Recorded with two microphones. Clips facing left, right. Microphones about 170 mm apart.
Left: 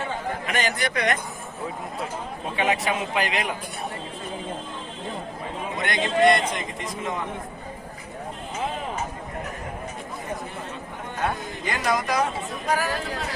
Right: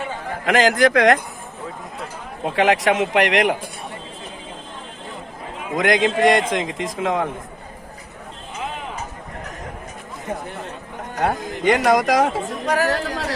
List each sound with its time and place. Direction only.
0.4 s a man's voice: 90° right
2.4 s a man's voice: 90° right
5.7 s a man's voice: 90° right
11.2 s a man's voice: 80° right
12.6 s a man's voice: 80° right